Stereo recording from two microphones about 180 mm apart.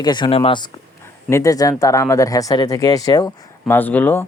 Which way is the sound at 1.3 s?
20° left (ahead or behind).